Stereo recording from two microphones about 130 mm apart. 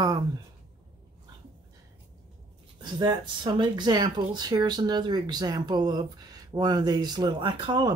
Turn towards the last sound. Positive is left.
turn(degrees=-35)  # may be behind; listen again after turning